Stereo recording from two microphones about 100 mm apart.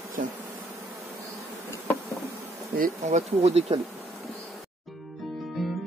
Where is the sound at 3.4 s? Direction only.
90° right.